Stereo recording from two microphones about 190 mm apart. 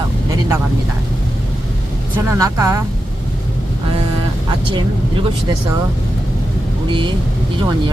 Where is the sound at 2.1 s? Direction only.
15° right (ahead or behind).